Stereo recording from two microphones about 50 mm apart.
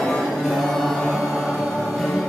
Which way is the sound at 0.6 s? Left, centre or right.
Centre.